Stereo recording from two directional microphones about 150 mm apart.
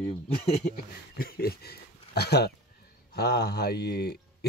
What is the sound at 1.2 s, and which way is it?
Speech, 85° left.